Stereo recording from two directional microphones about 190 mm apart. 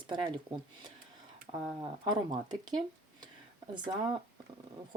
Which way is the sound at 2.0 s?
25° right (ahead or behind).